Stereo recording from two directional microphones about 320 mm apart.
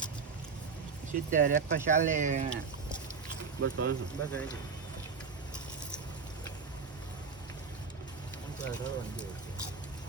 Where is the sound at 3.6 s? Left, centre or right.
Right.